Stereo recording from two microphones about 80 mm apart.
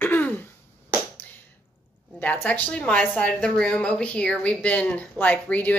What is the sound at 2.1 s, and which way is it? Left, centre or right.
A woman's voice, left.